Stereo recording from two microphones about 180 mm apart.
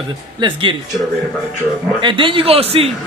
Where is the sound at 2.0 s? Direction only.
25° right (ahead or behind).